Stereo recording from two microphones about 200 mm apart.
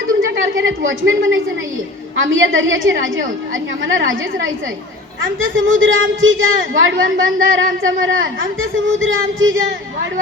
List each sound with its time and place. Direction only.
0.9 s a woman's voice: 75° right (ahead or behind)